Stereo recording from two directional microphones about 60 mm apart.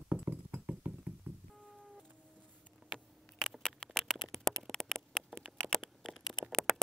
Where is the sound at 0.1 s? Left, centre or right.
Right.